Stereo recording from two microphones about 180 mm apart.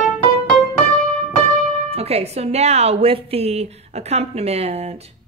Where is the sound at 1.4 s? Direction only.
35° right (ahead or behind).